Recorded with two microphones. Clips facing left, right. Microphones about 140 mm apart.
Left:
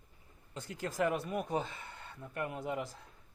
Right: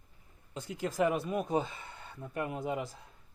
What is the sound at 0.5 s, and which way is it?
Speech, 15° right (ahead or behind).